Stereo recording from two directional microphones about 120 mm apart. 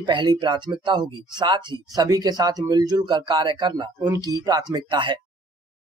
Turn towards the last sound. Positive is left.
turn(degrees=-40)  # may be behind; listen again after turning